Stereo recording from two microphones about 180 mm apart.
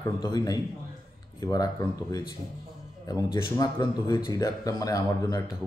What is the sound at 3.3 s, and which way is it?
A man's voice, 20° left (ahead or behind).